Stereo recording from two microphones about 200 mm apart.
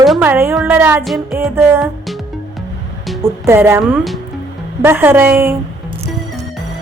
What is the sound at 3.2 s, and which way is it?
A woman's voice, 10° right (ahead or behind).